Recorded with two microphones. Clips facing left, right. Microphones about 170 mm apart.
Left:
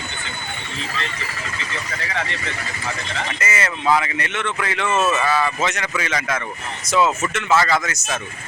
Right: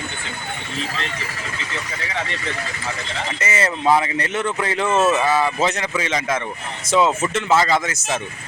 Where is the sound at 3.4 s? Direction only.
30° right (ahead or behind).